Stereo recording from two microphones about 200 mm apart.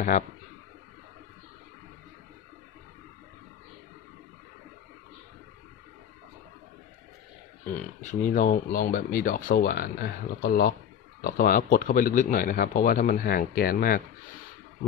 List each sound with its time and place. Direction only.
7.7 s speech: 35° left (ahead or behind)